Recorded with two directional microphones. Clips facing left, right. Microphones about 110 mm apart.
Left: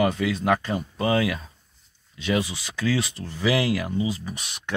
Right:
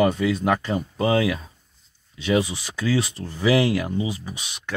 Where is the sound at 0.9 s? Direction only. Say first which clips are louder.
Right 2 dB; 25° right (ahead or behind).